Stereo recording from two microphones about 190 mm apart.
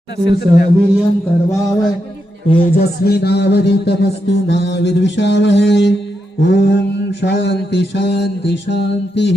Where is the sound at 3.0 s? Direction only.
55° left (ahead or behind).